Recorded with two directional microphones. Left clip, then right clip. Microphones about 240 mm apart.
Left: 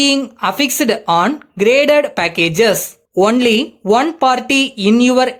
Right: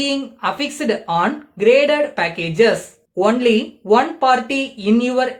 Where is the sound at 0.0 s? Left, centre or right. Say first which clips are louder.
Left 6 dB; left.